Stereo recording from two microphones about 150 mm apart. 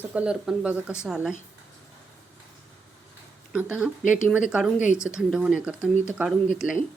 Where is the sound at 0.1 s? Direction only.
5° right (ahead or behind).